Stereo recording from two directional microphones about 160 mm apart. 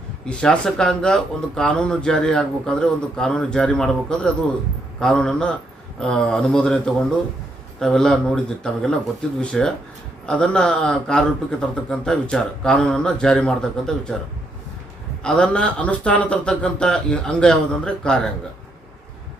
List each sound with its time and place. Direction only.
0.3 s a man's voice: 5° left (ahead or behind)
15.2 s speech: 5° left (ahead or behind)